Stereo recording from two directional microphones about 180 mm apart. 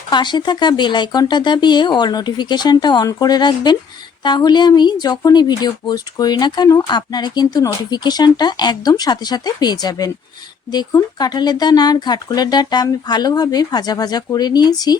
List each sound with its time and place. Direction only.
0.1 s speech: 25° left (ahead or behind)